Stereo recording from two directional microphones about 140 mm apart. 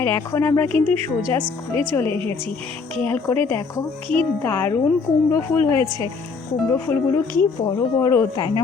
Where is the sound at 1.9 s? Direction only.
15° left (ahead or behind).